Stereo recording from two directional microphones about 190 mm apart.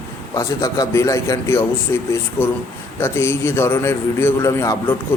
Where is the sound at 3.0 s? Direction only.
15° left (ahead or behind).